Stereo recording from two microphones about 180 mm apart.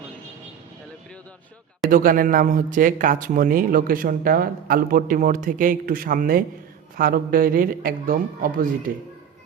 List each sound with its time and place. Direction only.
1.9 s speech: 50° right (ahead or behind)